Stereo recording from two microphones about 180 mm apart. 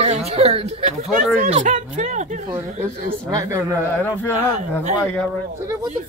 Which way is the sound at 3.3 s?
20° right (ahead or behind).